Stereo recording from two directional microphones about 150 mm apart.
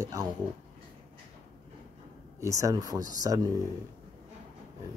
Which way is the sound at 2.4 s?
20° right (ahead or behind).